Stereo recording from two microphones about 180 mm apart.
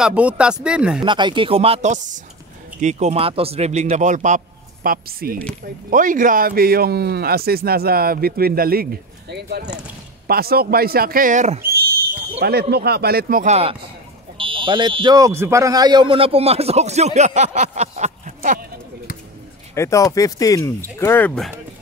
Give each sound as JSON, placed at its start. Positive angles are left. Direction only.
{"t": 0.0, "sound": "speech", "side_deg": -5}
{"t": 1.0, "sound": "speech", "side_deg": -25}
{"t": 4.8, "sound": "speech", "side_deg": -55}
{"t": 9.3, "sound": "speech", "side_deg": -65}
{"t": 11.6, "sound": "speech", "side_deg": -55}
{"t": 13.5, "sound": "speech", "side_deg": -35}
{"t": 19.7, "sound": "speech", "side_deg": 15}